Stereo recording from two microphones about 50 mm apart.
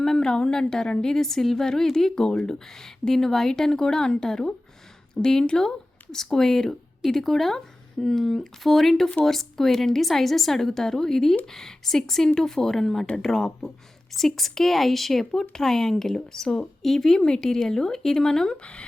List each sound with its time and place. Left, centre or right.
0.0 s a woman's voice: centre
18.5 s speech: left